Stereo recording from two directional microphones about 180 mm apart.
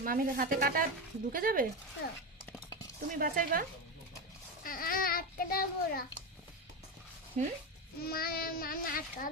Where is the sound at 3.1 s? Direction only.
50° right (ahead or behind).